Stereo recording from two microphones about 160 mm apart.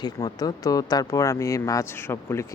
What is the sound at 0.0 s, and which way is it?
Speech, 25° left (ahead or behind).